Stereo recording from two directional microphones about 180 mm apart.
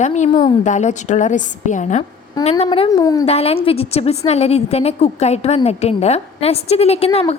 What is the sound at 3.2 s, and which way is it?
A woman's voice, 35° left (ahead or behind).